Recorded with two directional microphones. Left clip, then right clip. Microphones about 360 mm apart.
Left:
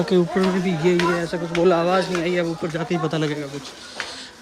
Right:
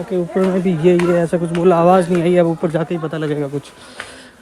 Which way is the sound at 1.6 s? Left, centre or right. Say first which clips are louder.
Right 6 dB; centre.